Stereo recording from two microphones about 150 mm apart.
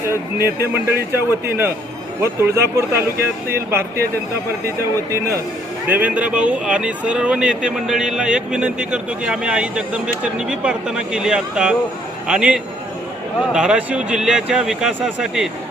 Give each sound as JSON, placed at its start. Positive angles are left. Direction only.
{"t": 0.4, "sound": "speech", "side_deg": -15}
{"t": 5.9, "sound": "a man's voice", "side_deg": -10}